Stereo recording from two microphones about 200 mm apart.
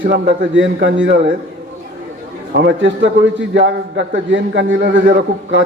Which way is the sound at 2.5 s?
65° right (ahead or behind).